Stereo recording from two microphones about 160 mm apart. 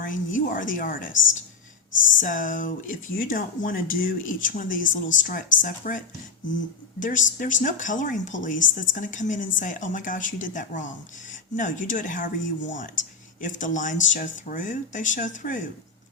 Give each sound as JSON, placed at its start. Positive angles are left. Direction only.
{"t": 0.0, "sound": "speech", "side_deg": 55}
{"t": 2.1, "sound": "speech", "side_deg": 55}
{"t": 7.0, "sound": "speech", "side_deg": 55}